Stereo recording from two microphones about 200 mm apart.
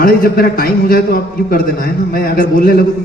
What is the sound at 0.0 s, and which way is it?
A man's voice, 45° left (ahead or behind).